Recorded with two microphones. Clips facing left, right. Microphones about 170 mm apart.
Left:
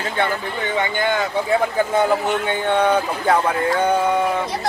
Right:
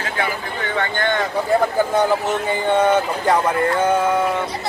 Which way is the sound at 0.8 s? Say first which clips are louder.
Even; 5° left (ahead or behind).